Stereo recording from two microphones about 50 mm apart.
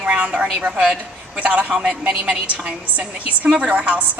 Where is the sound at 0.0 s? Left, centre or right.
Right.